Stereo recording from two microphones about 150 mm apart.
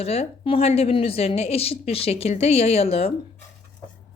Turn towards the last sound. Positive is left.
turn(degrees=40)  # may be behind; listen again after turning